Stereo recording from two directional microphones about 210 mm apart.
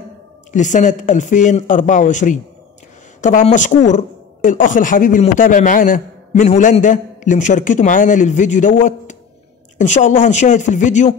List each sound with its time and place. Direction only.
0.5 s speech: 35° left (ahead or behind)